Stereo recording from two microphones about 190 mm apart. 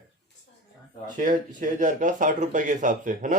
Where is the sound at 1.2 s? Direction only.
45° right (ahead or behind).